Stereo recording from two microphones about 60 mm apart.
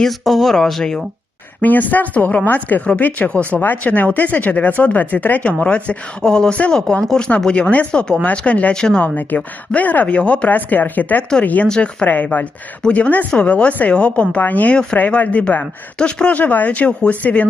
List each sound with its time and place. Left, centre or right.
0.0 s speech: centre
1.6 s speech: left
8.7 s speech: centre
11.7 s speech: centre
12.0 s speech: left
16.4 s speech: left